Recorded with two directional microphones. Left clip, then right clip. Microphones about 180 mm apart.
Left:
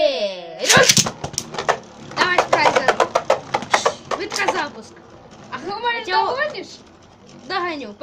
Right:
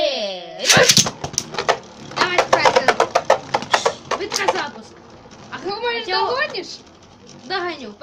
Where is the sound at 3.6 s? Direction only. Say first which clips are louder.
Even; 10° right (ahead or behind).